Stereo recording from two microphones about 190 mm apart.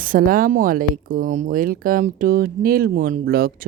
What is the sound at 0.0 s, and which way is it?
Speech, 50° right (ahead or behind).